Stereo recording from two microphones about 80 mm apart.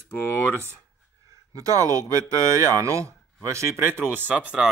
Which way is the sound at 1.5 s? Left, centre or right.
Right.